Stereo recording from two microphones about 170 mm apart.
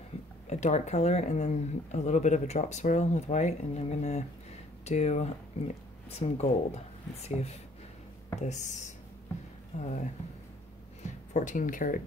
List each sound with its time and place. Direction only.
0.5 s speech: 40° left (ahead or behind)